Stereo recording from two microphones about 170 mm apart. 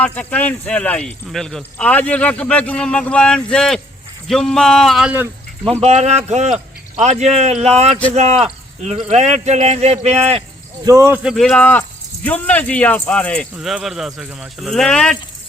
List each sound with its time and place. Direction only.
0.0 s speech: 10° left (ahead or behind); by 5.3 s 10° right (ahead or behind)
5.8 s a man's voice: 40° right (ahead or behind)
10.8 s speech: 15° right (ahead or behind); by 15.2 s 5° left (ahead or behind)